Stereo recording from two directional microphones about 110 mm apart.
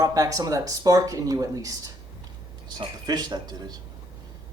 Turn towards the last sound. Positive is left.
turn(degrees=-40)  # may be behind; listen again after turning